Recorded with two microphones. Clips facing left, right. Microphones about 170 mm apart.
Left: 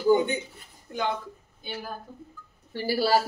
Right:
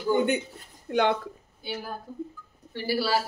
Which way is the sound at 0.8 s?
70° right (ahead or behind).